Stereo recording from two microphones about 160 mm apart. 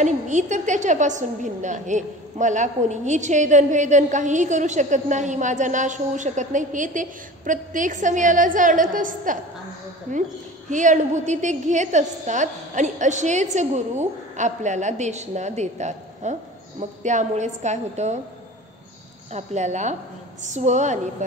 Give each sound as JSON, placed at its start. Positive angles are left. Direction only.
{"t": 0.0, "sound": "a woman's voice", "side_deg": -50}
{"t": 19.3, "sound": "a woman's voice", "side_deg": -45}